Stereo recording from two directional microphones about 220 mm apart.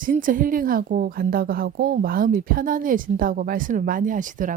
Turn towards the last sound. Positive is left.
turn(degrees=-35)  # may be behind; listen again after turning